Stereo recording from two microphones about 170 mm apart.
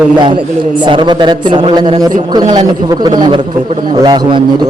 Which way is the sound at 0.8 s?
25° right (ahead or behind).